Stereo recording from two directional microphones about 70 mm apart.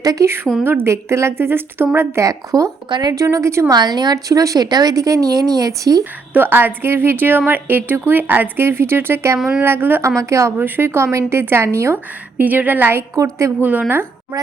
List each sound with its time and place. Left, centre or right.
0.0 s a woman's voice: right
0.6 s a woman's voice: right
2.2 s speech: right
2.9 s speech: right
3.2 s speech: right
3.7 s a woman's voice: right
6.3 s a woman's voice: right
10.2 s speech: right
10.6 s a woman's voice: right
12.4 s a woman's voice: right
13.1 s speech: right
13.6 s a woman's voice: right